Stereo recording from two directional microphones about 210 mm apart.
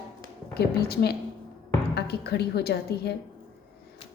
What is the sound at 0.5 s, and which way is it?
A woman's voice, 50° left (ahead or behind).